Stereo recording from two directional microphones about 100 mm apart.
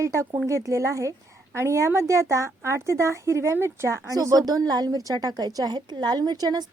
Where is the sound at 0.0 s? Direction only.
30° right (ahead or behind).